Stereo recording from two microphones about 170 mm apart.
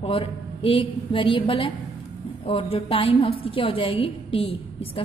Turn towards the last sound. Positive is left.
turn(degrees=35)  # may be behind; listen again after turning